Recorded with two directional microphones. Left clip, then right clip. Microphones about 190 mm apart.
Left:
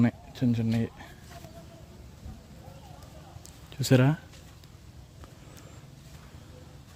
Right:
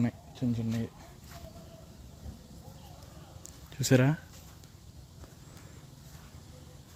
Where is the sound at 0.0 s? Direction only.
30° left (ahead or behind).